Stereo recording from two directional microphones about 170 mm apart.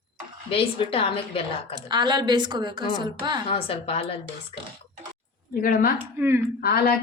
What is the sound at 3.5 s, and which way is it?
A woman's voice, 35° left (ahead or behind).